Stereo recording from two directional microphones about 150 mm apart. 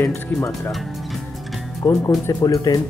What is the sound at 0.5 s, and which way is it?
Speech, centre (ahead or behind).